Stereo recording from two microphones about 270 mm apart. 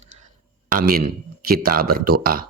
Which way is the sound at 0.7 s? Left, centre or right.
Right.